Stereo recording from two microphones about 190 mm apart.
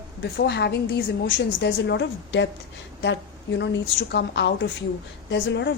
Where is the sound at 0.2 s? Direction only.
65° left (ahead or behind).